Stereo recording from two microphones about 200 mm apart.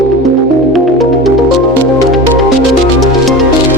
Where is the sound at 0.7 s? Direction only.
Centre (ahead or behind).